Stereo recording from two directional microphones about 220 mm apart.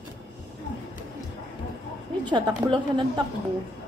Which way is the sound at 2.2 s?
20° right (ahead or behind).